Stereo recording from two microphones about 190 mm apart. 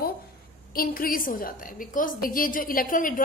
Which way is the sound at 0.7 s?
50° left (ahead or behind).